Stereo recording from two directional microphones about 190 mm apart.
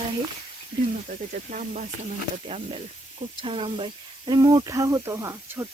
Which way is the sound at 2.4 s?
30° right (ahead or behind).